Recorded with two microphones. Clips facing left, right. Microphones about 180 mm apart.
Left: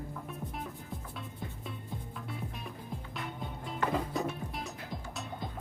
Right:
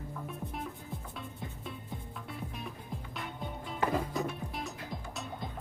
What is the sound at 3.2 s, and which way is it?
Music, centre (ahead or behind).